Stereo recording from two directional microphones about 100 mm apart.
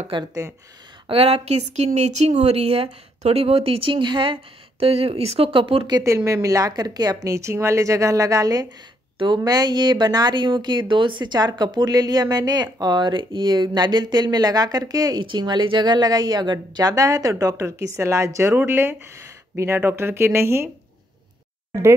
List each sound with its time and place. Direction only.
0.1 s speech: 55° right (ahead or behind)
1.0 s a woman's voice: 80° right; by 5.9 s 65° right (ahead or behind)
6.0 s a woman's voice: 30° right (ahead or behind)